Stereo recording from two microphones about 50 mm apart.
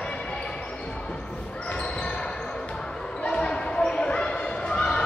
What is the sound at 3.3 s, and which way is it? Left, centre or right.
Basketball bounce, centre.